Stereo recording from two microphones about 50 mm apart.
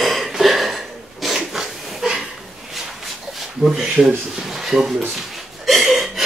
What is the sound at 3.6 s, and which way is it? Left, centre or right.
Speech, right.